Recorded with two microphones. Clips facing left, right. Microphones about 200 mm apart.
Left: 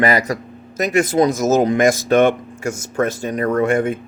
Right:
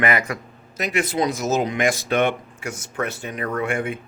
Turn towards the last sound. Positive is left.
turn(degrees=40)  # may be behind; listen again after turning